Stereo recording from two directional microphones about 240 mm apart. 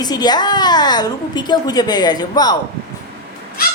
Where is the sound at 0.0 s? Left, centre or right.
Centre.